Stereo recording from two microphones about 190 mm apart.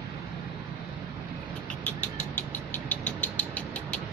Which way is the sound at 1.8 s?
10° left (ahead or behind).